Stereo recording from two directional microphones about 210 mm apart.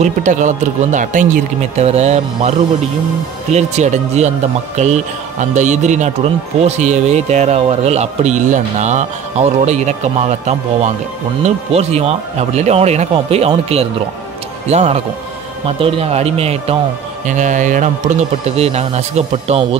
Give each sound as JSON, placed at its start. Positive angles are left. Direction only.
{"t": 0.0, "sound": "speech", "side_deg": -35}
{"t": 3.5, "sound": "a man's voice", "side_deg": -35}